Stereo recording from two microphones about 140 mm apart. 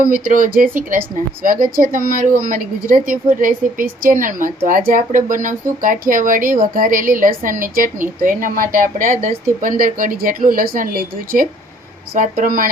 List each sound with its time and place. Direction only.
0.0 s a woman's voice: 80° right
12.1 s speech: 75° right (ahead or behind)